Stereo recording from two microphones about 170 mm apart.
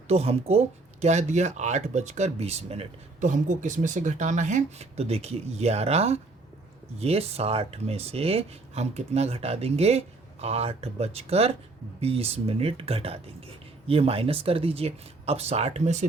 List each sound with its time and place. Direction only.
0.1 s speech: 35° right (ahead or behind)